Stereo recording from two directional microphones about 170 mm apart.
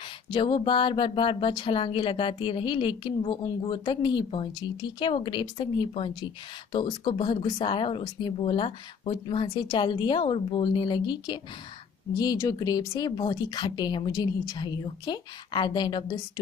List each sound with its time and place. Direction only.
0.3 s speech: 30° left (ahead or behind)